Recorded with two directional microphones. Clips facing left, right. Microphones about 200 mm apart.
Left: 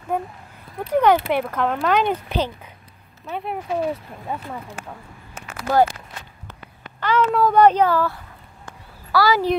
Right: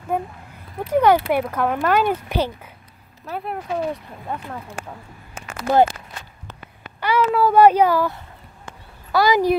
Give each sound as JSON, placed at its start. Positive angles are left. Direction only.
{"t": 0.9, "sound": "speech", "side_deg": -10}
{"t": 3.3, "sound": "speech", "side_deg": 0}
{"t": 5.6, "sound": "speech", "side_deg": -20}
{"t": 7.0, "sound": "speech", "side_deg": -10}
{"t": 8.6, "sound": "a sound", "side_deg": -20}